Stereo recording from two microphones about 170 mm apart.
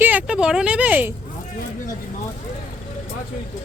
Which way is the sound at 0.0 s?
10° right (ahead or behind).